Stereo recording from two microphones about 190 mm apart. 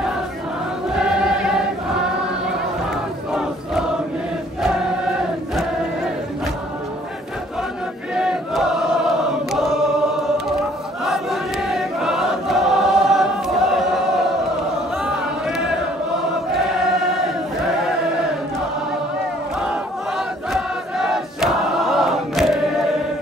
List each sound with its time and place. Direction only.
0.9 s choir: 5° right (ahead or behind)
8.1 s chant: 5° right (ahead or behind)
11.1 s choir: centre (ahead or behind)
15.0 s a sound: centre (ahead or behind)
16.5 s choir: centre (ahead or behind)
19.6 s a sound: 5° right (ahead or behind)